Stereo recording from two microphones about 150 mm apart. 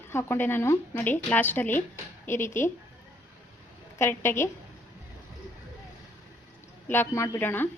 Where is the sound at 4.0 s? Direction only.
15° left (ahead or behind).